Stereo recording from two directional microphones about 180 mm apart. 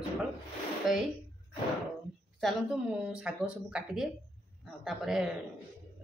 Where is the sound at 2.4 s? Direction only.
5° right (ahead or behind).